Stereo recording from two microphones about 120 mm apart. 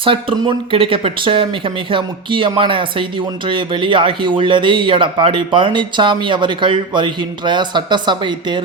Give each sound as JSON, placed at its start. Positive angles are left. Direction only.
{"t": 0.0, "sound": "speech", "side_deg": -45}